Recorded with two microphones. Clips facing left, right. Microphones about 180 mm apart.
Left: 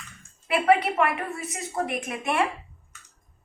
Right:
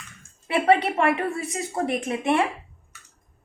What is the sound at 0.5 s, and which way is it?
A woman's voice, 30° right (ahead or behind).